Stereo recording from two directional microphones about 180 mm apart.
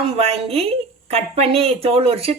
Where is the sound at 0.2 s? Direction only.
35° right (ahead or behind).